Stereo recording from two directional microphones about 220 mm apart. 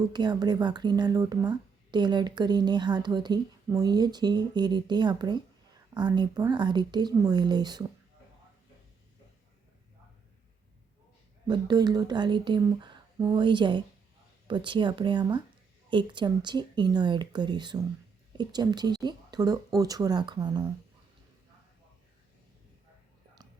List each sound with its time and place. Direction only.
0.1 s speech: 20° right (ahead or behind)
11.4 s speech: 20° right (ahead or behind)